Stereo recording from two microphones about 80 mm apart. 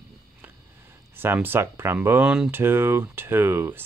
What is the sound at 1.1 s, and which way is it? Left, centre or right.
Speech, right.